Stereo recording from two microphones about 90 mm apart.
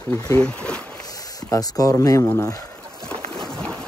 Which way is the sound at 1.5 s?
40° left (ahead or behind).